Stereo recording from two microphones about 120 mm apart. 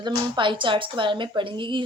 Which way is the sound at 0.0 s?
45° right (ahead or behind).